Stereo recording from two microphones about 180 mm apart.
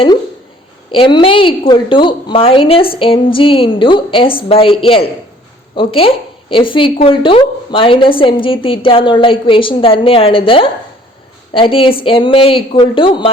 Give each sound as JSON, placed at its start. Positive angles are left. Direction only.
{"t": 0.9, "sound": "a woman's voice", "side_deg": 25}